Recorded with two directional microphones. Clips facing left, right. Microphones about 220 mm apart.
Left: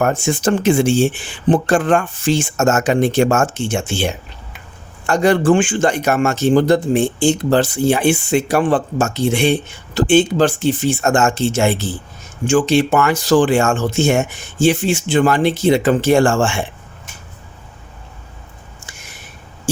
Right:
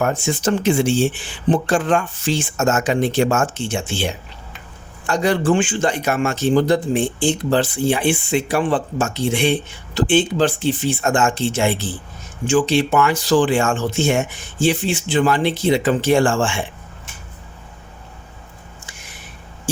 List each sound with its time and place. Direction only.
0.0 s speech: 50° left (ahead or behind)